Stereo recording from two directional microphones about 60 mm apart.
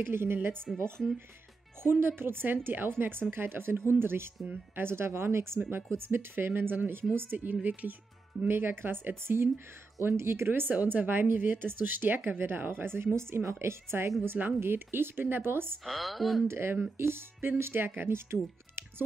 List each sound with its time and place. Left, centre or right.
0.0 s a woman's voice: right
1.8 s a woman's voice: right
15.8 s speech: centre
16.4 s a woman's voice: right